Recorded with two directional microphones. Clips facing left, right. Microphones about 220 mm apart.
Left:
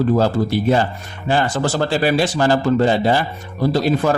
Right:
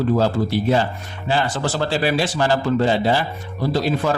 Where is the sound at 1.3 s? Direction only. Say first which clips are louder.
Left 3 dB; 45° left (ahead or behind).